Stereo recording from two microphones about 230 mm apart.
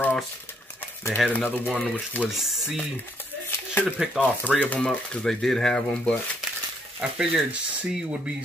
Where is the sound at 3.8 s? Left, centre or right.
Centre.